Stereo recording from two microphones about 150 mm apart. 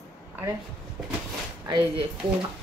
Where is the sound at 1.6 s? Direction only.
30° right (ahead or behind).